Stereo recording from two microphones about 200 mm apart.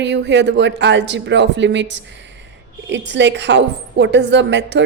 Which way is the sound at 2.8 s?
60° right (ahead or behind).